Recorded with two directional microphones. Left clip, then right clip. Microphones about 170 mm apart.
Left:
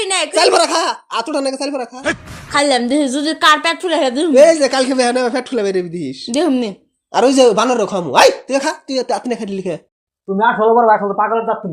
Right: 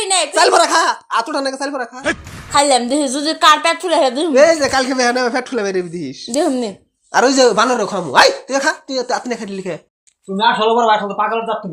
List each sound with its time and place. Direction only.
0.0 s a sound: 55° left (ahead or behind)
0.3 s speech: 30° left (ahead or behind)
2.5 s a woman's voice: 55° left (ahead or behind)
4.4 s speech: 30° left (ahead or behind)
6.3 s a woman's voice: 60° left (ahead or behind)
7.1 s speech: 25° left (ahead or behind)
10.3 s speech: 10° left (ahead or behind)